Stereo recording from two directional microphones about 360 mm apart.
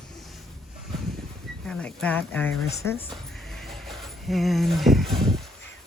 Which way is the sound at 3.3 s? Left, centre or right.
Centre.